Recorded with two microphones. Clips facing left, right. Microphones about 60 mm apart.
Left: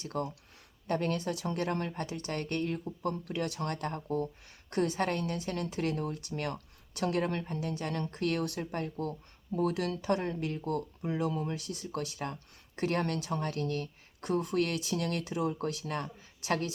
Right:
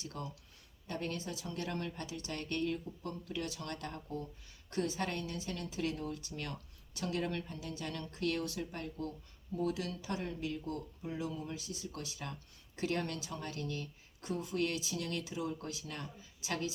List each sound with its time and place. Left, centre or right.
0.0 s speech: left